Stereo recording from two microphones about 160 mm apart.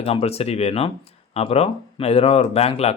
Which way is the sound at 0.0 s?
40° left (ahead or behind).